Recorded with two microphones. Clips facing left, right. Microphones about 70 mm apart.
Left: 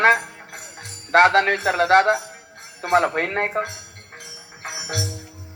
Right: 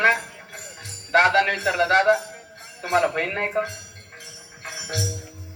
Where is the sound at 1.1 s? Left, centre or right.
Left.